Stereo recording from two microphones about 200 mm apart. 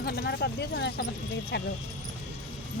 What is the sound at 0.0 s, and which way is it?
Speech, 55° left (ahead or behind).